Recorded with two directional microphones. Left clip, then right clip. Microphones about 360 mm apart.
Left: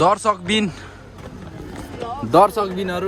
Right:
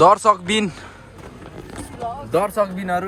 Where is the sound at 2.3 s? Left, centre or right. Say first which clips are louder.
Left 5 dB; centre.